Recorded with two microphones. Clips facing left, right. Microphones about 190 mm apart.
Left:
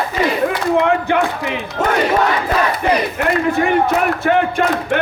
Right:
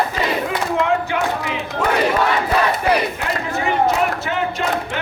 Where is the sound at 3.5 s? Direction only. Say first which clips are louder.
Left 1 dB; 55° left (ahead or behind).